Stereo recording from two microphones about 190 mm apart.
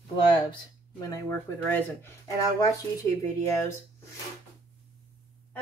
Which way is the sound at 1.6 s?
10° left (ahead or behind).